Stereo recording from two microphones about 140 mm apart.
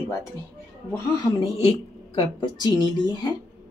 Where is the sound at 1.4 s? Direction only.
40° left (ahead or behind).